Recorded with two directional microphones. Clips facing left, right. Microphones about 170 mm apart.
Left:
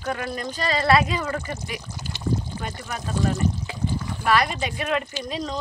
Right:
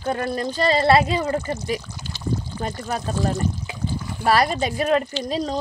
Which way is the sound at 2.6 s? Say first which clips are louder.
Right 5 dB; 35° right (ahead or behind).